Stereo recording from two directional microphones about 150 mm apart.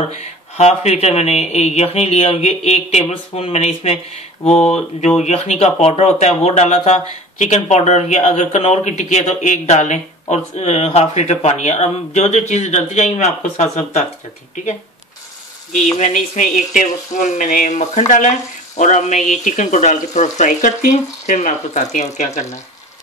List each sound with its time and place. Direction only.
0.1 s speech: 45° left (ahead or behind)